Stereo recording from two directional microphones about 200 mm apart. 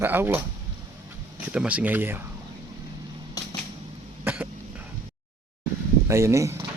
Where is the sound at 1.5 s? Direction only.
5° right (ahead or behind).